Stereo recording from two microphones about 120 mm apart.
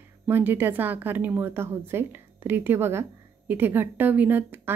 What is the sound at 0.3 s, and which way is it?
A woman's voice, 15° right (ahead or behind).